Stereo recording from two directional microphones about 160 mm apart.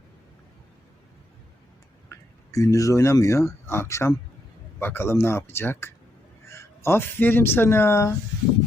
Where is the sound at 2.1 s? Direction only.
20° left (ahead or behind).